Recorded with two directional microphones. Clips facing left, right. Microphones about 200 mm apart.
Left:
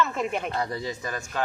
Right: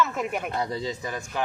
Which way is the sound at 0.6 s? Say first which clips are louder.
Right 1 dB; 20° right (ahead or behind).